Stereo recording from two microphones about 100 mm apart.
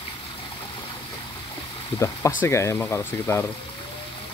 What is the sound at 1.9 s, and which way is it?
Speech, 60° left (ahead or behind).